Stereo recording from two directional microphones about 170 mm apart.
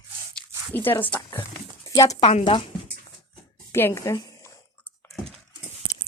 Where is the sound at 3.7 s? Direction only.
15° left (ahead or behind).